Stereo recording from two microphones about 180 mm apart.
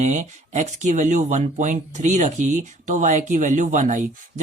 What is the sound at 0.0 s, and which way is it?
Speech, 40° right (ahead or behind).